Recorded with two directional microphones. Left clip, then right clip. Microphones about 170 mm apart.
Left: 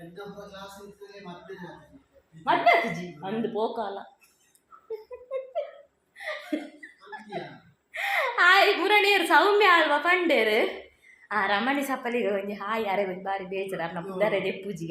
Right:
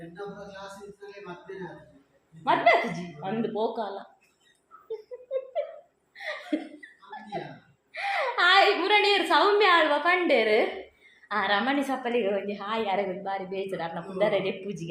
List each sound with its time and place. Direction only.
2.4 s a woman's voice: 20° left (ahead or behind)
6.1 s laughter: 15° left (ahead or behind)
7.9 s a woman's voice: 25° left (ahead or behind)